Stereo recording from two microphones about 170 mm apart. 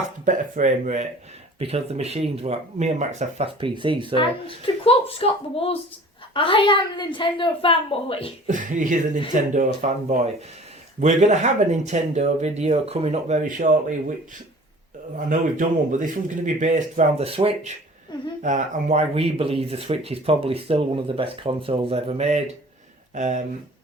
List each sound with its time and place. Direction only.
0.3 s speech: 45° right (ahead or behind); by 4.1 s 30° right (ahead or behind)
4.1 s a woman's voice: 30° left (ahead or behind)
8.4 s speech: 50° right (ahead or behind)
15.1 s speech: 50° right (ahead or behind)